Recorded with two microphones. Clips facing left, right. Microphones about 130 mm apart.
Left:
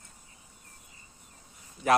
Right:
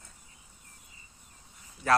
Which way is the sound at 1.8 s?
20° left (ahead or behind).